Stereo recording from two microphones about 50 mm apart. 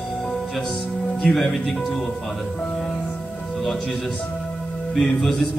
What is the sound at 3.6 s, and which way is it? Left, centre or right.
Music, centre.